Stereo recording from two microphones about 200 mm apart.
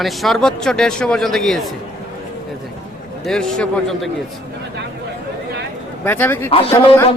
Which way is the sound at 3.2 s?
5° left (ahead or behind).